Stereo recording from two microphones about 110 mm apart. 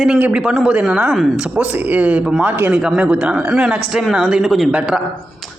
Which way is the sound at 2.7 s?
5° right (ahead or behind).